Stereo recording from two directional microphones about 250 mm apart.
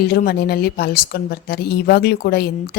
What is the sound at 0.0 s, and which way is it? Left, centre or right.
A woman's voice, left.